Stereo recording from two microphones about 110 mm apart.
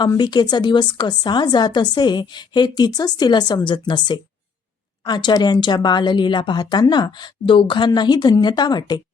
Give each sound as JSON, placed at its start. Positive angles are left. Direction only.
{"t": 0.2, "sound": "a woman's voice", "side_deg": 40}